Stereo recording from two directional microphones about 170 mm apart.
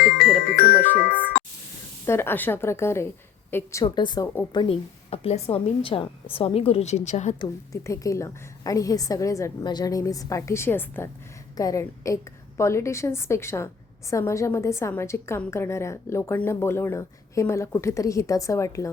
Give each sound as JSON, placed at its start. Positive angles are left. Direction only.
{"t": 0.5, "sound": "music", "side_deg": 60}
{"t": 2.0, "sound": "a woman's voice", "side_deg": 15}
{"t": 7.3, "sound": "a woman's voice", "side_deg": 20}